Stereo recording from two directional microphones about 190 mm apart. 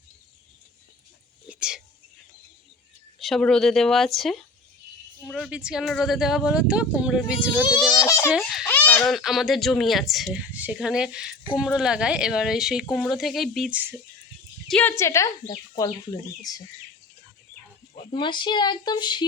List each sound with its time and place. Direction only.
1.5 s a sound: 5° right (ahead or behind)
3.2 s speech: centre (ahead or behind)
7.7 s speech: 20° left (ahead or behind)
8.3 s speech: centre (ahead or behind)
8.6 s speech: 10° left (ahead or behind); by 14.0 s 10° right (ahead or behind)
14.7 s speech: 10° left (ahead or behind)
18.1 s speech: 25° left (ahead or behind)